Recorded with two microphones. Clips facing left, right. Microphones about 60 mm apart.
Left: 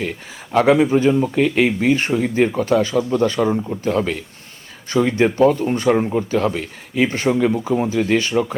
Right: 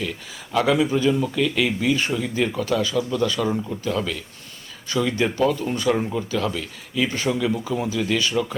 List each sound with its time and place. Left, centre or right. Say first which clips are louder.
0.0 s a man's voice: left 4 dB; left
3.5 s speech: left 4 dB; centre
3.8 s a man's voice: left 7 dB; left